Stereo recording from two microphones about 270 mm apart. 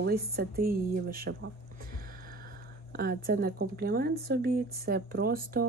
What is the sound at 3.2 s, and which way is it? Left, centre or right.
Speech, right.